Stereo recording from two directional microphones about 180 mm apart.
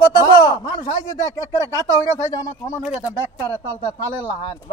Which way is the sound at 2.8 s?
5° right (ahead or behind).